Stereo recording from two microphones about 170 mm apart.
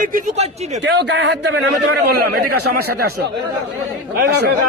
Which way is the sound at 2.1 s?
65° right (ahead or behind).